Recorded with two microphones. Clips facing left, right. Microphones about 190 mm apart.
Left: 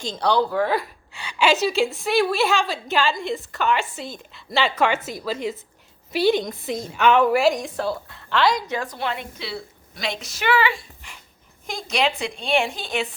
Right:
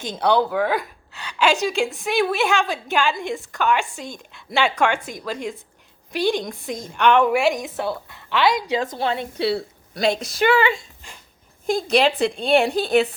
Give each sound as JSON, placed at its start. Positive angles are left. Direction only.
{"t": 0.2, "sound": "a woman's voice", "side_deg": -5}
{"t": 8.6, "sound": "a woman's voice", "side_deg": -20}
{"t": 9.0, "sound": "a woman's voice", "side_deg": -35}